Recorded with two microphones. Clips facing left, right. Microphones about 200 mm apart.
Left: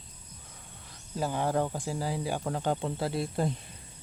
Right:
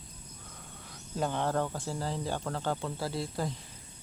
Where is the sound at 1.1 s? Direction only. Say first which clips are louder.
Left 2 dB; 5° left (ahead or behind); by 3.5 s 25° left (ahead or behind).